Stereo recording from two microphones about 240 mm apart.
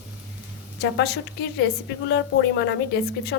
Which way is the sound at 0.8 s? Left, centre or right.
Left.